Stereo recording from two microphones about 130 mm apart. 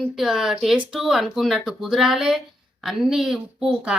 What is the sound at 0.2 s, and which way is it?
Speech, centre (ahead or behind).